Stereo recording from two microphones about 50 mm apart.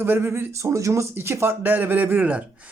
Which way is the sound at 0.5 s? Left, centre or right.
Right.